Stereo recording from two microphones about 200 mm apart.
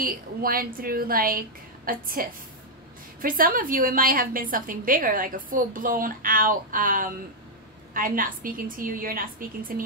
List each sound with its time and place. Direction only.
0.0 s a woman's voice: 45° right (ahead or behind)